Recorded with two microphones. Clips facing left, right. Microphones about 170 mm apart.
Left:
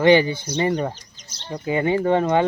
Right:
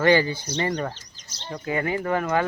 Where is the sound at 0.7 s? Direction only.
10° left (ahead or behind).